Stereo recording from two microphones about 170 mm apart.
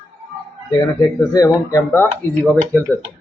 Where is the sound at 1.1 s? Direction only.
20° left (ahead or behind).